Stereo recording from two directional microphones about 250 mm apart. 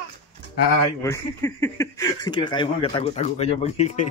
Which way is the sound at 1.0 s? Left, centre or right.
Centre.